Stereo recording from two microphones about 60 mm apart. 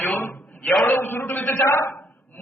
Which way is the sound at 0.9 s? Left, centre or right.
Left.